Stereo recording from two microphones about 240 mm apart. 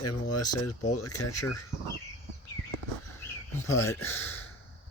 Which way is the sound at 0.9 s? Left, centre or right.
Left.